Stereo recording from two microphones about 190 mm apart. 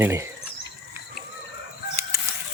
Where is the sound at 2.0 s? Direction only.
15° right (ahead or behind).